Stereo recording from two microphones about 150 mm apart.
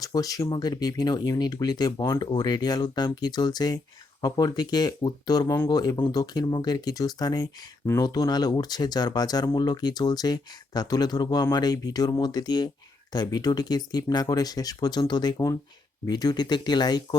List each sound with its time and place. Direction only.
0.0 s speech: 25° left (ahead or behind)